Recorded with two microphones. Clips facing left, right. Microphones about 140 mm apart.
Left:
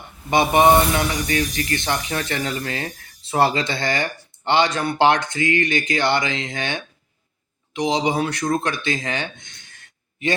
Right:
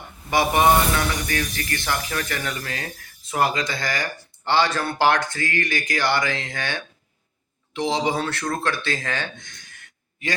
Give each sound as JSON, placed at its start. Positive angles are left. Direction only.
{"t": 0.3, "sound": "speech", "side_deg": 20}